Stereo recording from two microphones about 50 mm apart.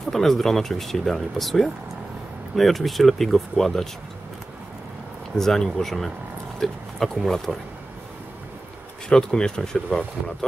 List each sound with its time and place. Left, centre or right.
0.1 s speech: centre
5.4 s speech: centre
9.1 s speech: centre